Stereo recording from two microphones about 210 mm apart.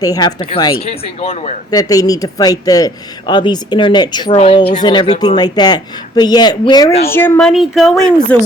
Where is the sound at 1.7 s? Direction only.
15° left (ahead or behind).